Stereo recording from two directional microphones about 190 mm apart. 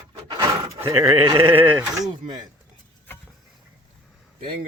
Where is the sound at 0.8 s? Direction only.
20° right (ahead or behind).